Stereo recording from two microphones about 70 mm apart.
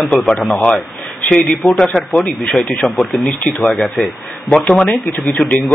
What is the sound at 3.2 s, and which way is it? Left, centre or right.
Speech, centre.